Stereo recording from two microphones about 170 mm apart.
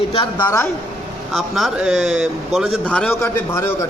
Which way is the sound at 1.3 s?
Centre (ahead or behind).